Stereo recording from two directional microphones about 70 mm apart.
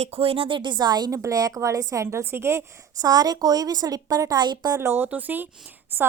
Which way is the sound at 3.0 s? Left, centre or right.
Right.